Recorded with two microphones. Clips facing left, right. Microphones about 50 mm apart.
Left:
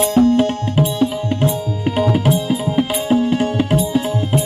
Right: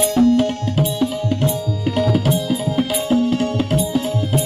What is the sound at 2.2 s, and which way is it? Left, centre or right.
Music, centre.